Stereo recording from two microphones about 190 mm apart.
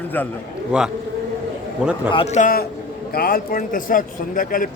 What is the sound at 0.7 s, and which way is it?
Speech, 5° right (ahead or behind).